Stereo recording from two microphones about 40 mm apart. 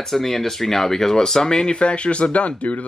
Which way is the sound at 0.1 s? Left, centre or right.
Centre.